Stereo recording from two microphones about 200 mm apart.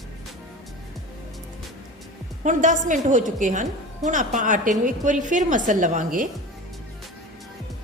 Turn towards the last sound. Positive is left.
turn(degrees=-40)  # may be behind; listen again after turning